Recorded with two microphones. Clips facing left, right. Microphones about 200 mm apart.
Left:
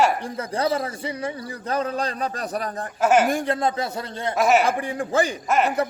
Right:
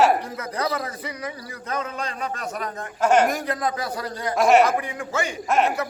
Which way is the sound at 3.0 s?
5° left (ahead or behind).